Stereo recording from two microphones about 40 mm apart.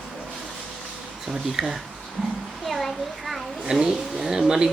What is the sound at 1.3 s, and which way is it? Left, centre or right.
Speech, centre.